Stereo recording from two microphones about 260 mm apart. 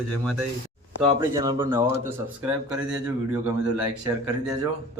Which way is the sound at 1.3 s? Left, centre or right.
Centre.